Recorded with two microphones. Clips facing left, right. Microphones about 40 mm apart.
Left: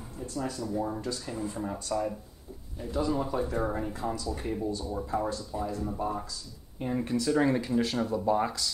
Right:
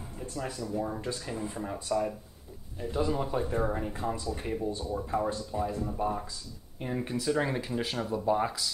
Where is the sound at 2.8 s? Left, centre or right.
Right.